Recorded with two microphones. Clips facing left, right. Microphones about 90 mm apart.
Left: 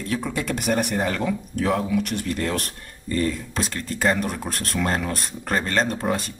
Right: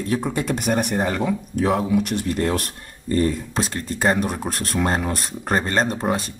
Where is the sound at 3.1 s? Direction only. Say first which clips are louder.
Right 4 dB; 30° right (ahead or behind).